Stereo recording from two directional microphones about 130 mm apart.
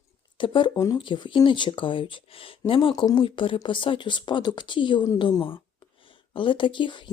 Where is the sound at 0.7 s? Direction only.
25° left (ahead or behind).